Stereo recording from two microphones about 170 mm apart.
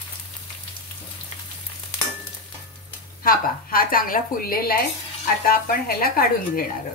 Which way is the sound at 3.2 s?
55° left (ahead or behind).